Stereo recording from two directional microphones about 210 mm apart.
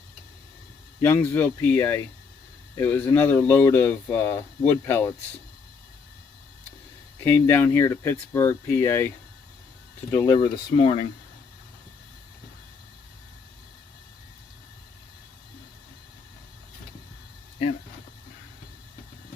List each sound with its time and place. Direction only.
1.0 s speech: 10° left (ahead or behind)
7.3 s speech: 10° left (ahead or behind)
10.1 s speech: 15° left (ahead or behind)
10.8 s speech: 30° left (ahead or behind)